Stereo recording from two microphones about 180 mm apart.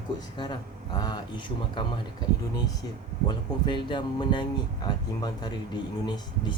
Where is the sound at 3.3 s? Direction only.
25° left (ahead or behind).